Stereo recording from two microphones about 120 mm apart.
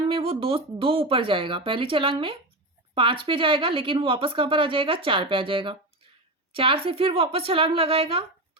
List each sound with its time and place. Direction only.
0.0 s speech: 50° right (ahead or behind)